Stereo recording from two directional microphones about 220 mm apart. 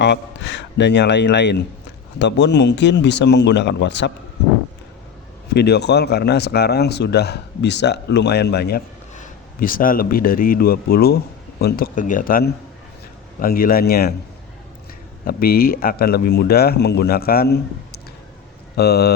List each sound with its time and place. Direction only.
0.0 s speech: 50° left (ahead or behind)
5.5 s speech: 50° left (ahead or behind)
9.1 s a man's voice: 35° left (ahead or behind)
15.2 s speech: 45° left (ahead or behind)